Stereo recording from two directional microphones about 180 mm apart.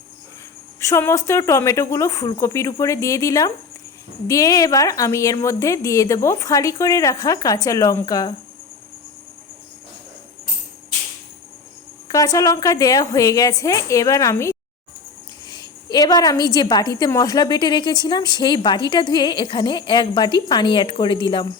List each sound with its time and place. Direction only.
0.8 s speech: 15° left (ahead or behind)
12.0 s a woman's voice: 20° left (ahead or behind)